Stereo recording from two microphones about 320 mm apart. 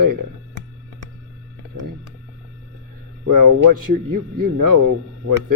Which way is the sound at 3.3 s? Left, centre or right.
Right.